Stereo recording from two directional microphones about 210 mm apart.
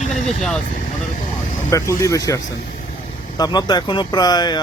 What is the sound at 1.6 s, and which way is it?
Speech, 15° left (ahead or behind).